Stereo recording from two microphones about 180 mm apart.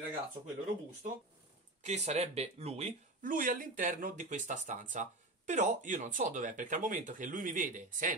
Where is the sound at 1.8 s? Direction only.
40° right (ahead or behind).